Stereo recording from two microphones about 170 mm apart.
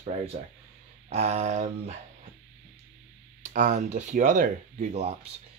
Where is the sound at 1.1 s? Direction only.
40° right (ahead or behind).